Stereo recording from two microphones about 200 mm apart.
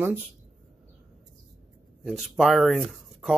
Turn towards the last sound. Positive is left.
turn(degrees=0)  # may be behind; listen again after turning